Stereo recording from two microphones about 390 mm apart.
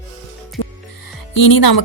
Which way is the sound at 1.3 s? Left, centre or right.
Left.